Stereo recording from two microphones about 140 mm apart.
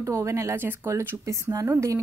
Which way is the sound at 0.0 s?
20° right (ahead or behind).